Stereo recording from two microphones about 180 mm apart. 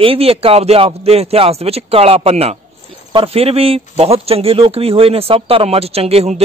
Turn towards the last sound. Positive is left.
turn(degrees=-35)  # may be behind; listen again after turning